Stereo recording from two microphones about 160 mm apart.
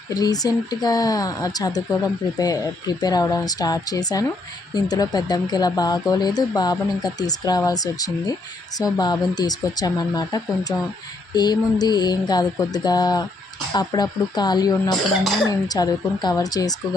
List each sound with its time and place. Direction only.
0.1 s speech: 25° left (ahead or behind)